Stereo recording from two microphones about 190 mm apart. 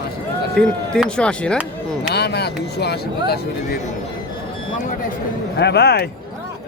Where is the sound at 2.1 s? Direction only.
60° left (ahead or behind).